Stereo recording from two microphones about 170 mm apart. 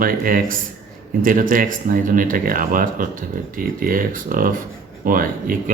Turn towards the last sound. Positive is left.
turn(degrees=-50)  # may be behind; listen again after turning